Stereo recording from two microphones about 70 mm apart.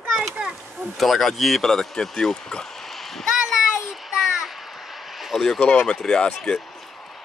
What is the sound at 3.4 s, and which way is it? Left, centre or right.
Vehicle, centre.